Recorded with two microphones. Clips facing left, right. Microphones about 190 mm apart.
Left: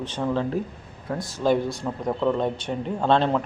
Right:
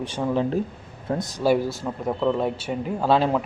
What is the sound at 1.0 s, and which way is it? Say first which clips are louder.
Speech: right 3 dB; 20° right (ahead or behind).